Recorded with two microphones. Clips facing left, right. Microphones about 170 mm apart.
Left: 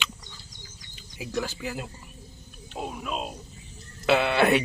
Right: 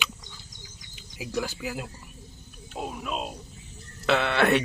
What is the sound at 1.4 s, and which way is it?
Speech, 10° right (ahead or behind).